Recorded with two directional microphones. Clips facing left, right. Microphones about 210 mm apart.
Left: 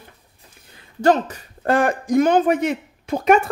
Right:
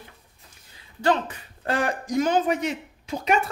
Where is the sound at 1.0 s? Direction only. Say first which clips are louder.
Left 6 dB; 40° left (ahead or behind).